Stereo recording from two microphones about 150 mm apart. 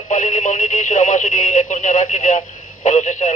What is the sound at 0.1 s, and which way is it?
Speech, 55° left (ahead or behind).